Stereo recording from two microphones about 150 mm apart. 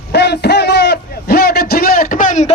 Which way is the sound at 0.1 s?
90° left.